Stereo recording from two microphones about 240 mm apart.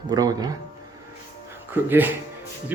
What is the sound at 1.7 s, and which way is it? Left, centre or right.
Speech, centre.